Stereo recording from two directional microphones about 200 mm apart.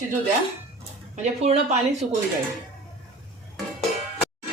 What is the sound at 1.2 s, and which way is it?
Speech, 35° right (ahead or behind).